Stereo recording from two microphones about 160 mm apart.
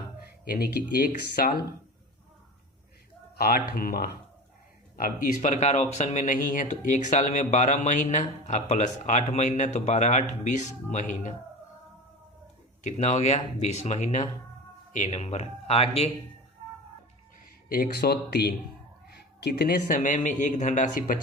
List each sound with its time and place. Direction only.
0.4 s speech: 70° left (ahead or behind)
3.3 s speech: 70° left (ahead or behind); by 11.3 s 50° left (ahead or behind)
12.8 s speech: 45° left (ahead or behind)
17.7 s speech: 65° left (ahead or behind); by 18.5 s 85° left
19.1 s cat: 90° left
19.9 s speech: 55° left (ahead or behind)